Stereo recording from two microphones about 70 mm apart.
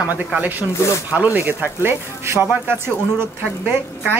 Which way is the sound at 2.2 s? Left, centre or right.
Right.